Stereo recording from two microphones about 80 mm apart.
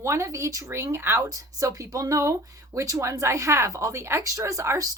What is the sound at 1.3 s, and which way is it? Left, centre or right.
Speech, right.